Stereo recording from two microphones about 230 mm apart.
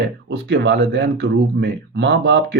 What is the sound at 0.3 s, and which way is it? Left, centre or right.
Speech, right.